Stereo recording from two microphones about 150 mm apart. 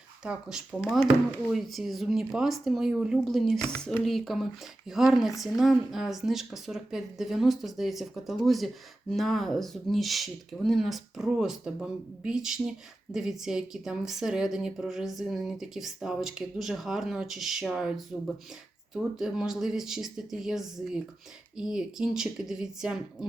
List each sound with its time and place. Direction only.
0.3 s speech: 5° right (ahead or behind)